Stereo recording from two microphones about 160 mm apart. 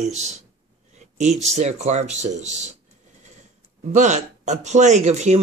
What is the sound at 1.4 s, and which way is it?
A man's voice, 45° right (ahead or behind).